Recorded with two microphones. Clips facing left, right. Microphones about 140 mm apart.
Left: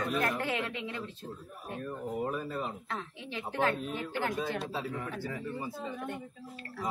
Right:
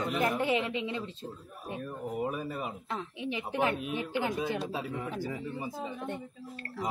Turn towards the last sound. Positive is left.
turn(degrees=-15)  # may be behind; listen again after turning